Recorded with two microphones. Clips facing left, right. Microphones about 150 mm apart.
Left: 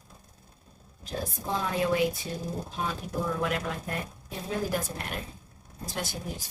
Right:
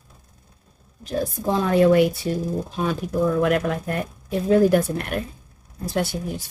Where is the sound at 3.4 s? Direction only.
60° right (ahead or behind).